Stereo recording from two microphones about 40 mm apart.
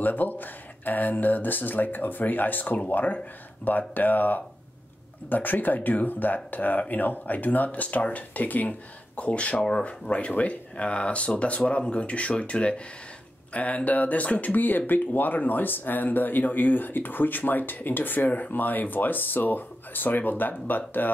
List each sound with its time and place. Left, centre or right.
0.0 s speech: left